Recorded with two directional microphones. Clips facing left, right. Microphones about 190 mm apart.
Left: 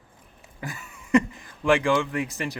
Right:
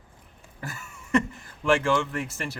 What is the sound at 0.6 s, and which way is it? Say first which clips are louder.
Speech: left 2 dB; 15° left (ahead or behind).